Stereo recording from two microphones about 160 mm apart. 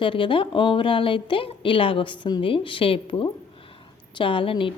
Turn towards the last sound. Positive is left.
turn(degrees=35)  # may be behind; listen again after turning